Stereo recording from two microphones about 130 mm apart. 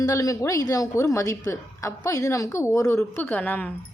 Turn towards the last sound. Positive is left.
turn(degrees=10)  # may be behind; listen again after turning